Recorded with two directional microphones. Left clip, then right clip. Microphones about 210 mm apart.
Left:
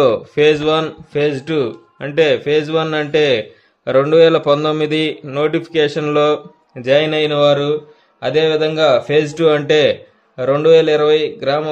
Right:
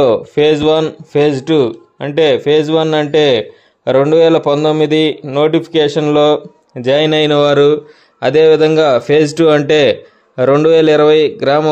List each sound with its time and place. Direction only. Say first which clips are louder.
0.0 s speech: right 2 dB; 20° right (ahead or behind); by 11.7 s 40° right (ahead or behind)